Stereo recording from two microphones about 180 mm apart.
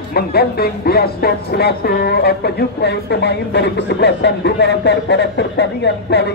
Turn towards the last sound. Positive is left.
turn(degrees=70)  # may be behind; listen again after turning